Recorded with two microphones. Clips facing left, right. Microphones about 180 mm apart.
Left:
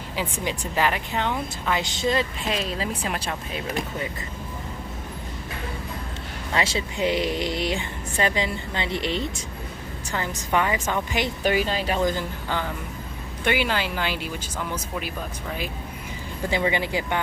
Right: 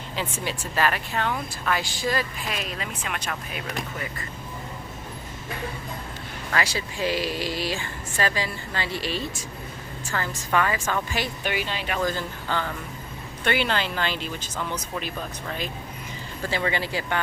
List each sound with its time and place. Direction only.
0.2 s speech: 15° left (ahead or behind)
6.5 s speech: 25° left (ahead or behind)
11.4 s speech: 40° left (ahead or behind)
11.9 s speech: 15° left (ahead or behind)